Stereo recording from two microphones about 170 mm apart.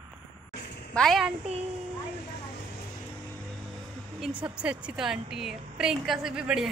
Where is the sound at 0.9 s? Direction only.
Centre (ahead or behind).